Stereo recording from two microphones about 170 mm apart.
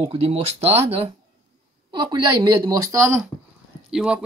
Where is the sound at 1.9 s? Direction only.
25° right (ahead or behind).